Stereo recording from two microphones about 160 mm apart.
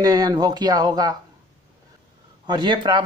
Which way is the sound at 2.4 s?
25° right (ahead or behind).